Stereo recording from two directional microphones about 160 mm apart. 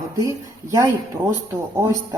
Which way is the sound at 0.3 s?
20° right (ahead or behind).